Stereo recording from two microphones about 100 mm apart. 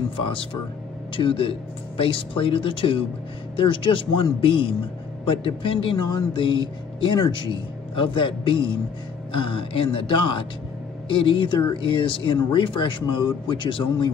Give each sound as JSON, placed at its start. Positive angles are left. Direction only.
{"t": 0.2, "sound": "speech", "side_deg": 60}
{"t": 5.9, "sound": "speech", "side_deg": 50}